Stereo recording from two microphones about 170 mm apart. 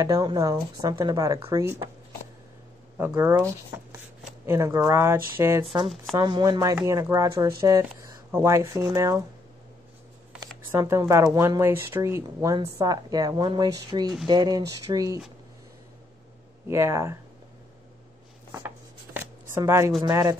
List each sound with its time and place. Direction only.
0.0 s speech: 20° right (ahead or behind)
3.2 s speech: 10° right (ahead or behind)
4.5 s speech: 15° right (ahead or behind)
10.3 s shuffling cards: 15° right (ahead or behind)
11.3 s speech: 15° right (ahead or behind)
16.6 s speech: 15° right (ahead or behind)
19.1 s shuffling cards: 15° right (ahead or behind)
20.1 s speech: 20° right (ahead or behind)